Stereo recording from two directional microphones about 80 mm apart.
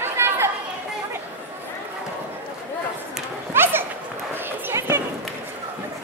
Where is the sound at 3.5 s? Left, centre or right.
Right.